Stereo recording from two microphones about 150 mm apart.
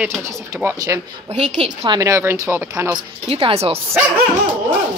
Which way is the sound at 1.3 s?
45° right (ahead or behind).